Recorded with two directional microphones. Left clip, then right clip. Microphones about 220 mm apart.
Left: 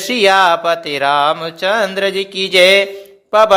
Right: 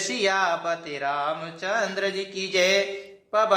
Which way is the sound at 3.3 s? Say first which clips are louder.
Left 12 dB; 40° left (ahead or behind).